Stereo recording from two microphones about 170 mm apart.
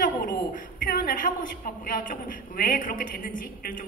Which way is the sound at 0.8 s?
55° left (ahead or behind).